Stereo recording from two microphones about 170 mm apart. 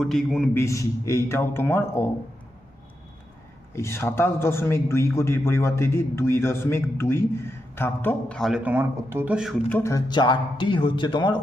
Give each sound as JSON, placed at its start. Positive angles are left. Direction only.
{"t": 0.0, "sound": "a man's voice", "side_deg": 0}
{"t": 0.5, "sound": "a man's voice", "side_deg": 15}
{"t": 3.8, "sound": "a man's voice", "side_deg": 15}
{"t": 8.4, "sound": "speech", "side_deg": 0}
{"t": 9.6, "sound": "speech", "side_deg": 15}